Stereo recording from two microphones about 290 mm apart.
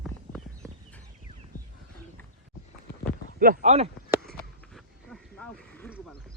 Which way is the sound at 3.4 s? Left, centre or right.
Right.